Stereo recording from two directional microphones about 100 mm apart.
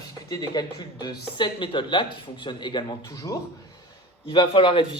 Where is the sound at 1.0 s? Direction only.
55° left (ahead or behind).